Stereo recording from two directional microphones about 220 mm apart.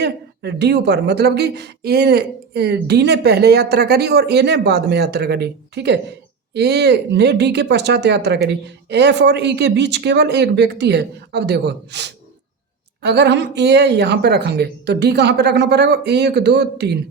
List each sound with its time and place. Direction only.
0.0 s speech: 50° right (ahead or behind)